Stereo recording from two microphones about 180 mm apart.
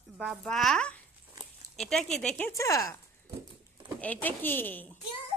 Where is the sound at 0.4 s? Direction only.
5° left (ahead or behind).